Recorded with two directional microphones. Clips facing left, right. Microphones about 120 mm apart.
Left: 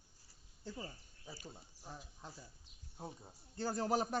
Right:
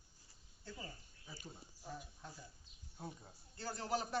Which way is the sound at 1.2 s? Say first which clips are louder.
Left 4 dB; 35° left (ahead or behind).